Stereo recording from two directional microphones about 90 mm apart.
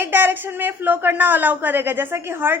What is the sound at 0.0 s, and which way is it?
A woman's voice, 25° right (ahead or behind).